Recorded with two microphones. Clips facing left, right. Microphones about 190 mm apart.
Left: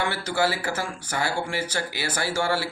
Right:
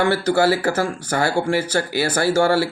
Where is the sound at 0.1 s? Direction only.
40° right (ahead or behind).